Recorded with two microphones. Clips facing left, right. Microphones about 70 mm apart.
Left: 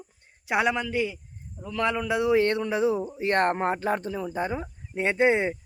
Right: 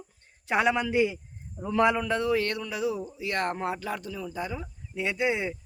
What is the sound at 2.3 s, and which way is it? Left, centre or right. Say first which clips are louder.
Speech: left 5 dB; left.